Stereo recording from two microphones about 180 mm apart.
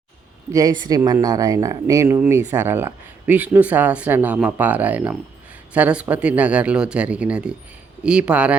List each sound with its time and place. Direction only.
0.5 s speech: 20° right (ahead or behind)